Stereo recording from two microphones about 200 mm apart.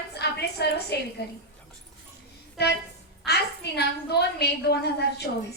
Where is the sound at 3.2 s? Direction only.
55° left (ahead or behind).